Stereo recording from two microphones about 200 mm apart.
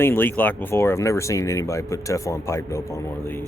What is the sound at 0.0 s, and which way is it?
Speech, 10° left (ahead or behind).